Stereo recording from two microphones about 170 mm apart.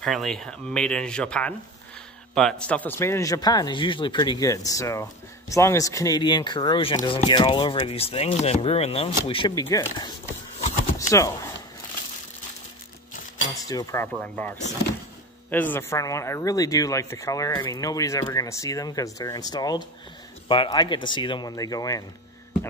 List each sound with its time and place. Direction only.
0.0 s speech: centre (ahead or behind); by 9.7 s 30° left (ahead or behind)
9.7 s speech: 20° left (ahead or behind)
13.7 s speech: 20° left (ahead or behind)
14.0 s speech: 10° left (ahead or behind)